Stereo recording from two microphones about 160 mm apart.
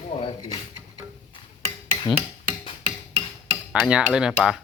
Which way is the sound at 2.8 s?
40° right (ahead or behind).